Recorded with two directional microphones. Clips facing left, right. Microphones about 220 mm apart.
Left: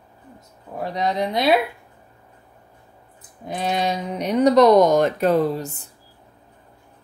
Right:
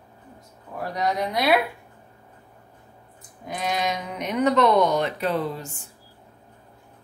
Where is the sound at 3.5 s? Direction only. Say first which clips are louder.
Left 3 dB; 30° left (ahead or behind).